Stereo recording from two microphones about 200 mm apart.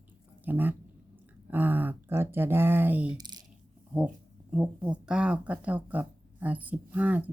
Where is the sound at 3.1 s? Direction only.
20° right (ahead or behind).